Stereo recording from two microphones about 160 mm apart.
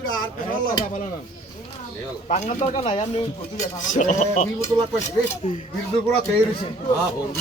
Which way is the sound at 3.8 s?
50° left (ahead or behind).